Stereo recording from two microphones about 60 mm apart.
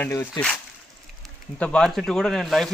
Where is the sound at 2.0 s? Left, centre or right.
Centre.